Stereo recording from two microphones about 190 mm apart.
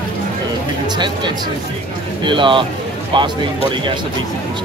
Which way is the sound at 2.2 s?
25° right (ahead or behind).